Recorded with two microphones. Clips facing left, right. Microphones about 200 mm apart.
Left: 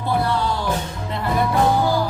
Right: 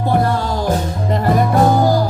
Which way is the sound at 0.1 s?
45° right (ahead or behind).